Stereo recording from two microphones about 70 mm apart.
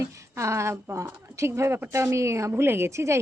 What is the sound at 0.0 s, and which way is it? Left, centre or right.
A woman's voice, right.